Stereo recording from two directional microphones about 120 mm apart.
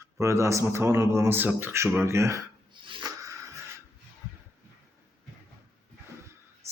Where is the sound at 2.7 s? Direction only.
45° right (ahead or behind).